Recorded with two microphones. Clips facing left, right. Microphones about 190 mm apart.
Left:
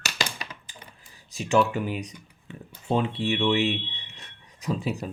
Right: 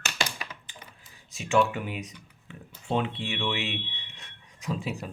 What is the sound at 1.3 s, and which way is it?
Speech, centre (ahead or behind).